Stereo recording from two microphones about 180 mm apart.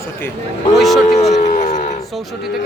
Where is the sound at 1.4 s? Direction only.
40° left (ahead or behind).